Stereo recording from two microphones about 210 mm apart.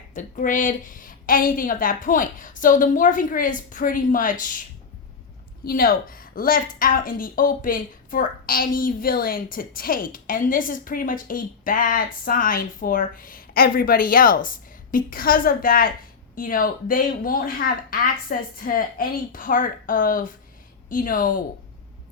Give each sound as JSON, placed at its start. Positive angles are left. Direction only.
{"t": 0.1, "sound": "a woman's voice", "side_deg": 40}
{"t": 5.6, "sound": "a woman's voice", "side_deg": 45}